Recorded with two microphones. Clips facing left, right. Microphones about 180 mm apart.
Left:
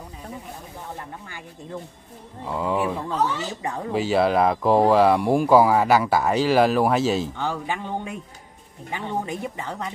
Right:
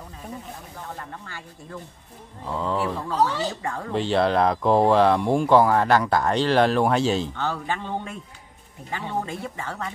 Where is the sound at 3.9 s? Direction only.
5° left (ahead or behind).